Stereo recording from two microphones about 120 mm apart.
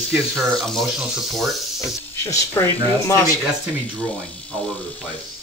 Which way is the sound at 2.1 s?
20° left (ahead or behind).